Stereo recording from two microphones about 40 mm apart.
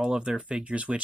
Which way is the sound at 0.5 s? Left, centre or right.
Right.